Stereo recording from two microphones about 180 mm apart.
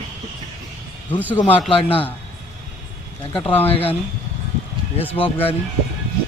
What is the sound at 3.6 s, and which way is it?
Speech, 30° left (ahead or behind).